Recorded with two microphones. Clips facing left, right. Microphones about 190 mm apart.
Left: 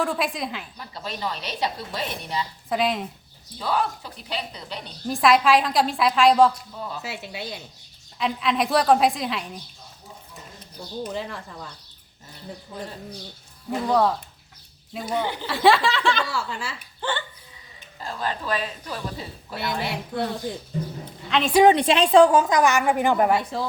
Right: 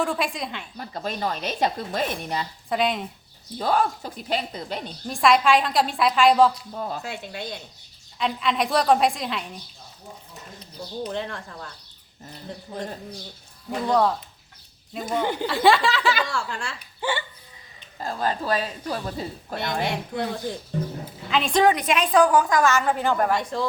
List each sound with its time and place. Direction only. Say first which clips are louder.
0.0 s a woman's voice: even; centre (ahead or behind)
0.8 s a woman's voice: right 6 dB; 45° right (ahead or behind)
2.6 s a woman's voice: even; centre (ahead or behind)
3.6 s a woman's voice: right 3 dB; 45° right (ahead or behind)
5.0 s a woman's voice: left 1 dB; centre (ahead or behind)
11.0 s a woman's voice: right 1 dB; centre (ahead or behind)
13.7 s a woman's voice: even; centre (ahead or behind)
17.0 s speech: right 1 dB; 10° right (ahead or behind)
18.0 s speech: right 3 dB; 40° right (ahead or behind)
19.9 s a woman's voice: even; centre (ahead or behind)
21.5 s a woman's voice: left 4 dB; 20° left (ahead or behind)
23.4 s a woman's voice: right 1 dB; 5° left (ahead or behind)